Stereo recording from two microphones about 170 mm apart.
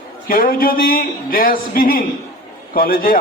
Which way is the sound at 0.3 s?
55° left (ahead or behind).